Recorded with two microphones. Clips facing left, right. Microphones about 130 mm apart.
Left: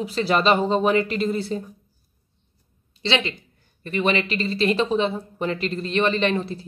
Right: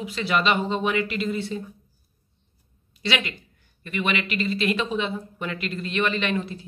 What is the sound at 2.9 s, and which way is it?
Speech, 25° left (ahead or behind).